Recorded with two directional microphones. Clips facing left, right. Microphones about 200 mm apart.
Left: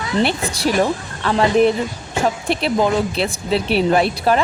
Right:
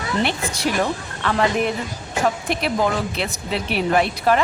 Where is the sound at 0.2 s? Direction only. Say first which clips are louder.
Left 5 dB; 35° left (ahead or behind).